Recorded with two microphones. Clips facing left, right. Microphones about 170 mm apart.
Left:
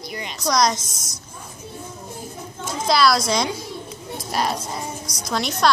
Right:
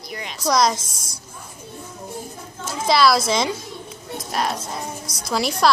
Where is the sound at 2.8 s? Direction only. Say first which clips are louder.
Right 1 dB; centre (ahead or behind).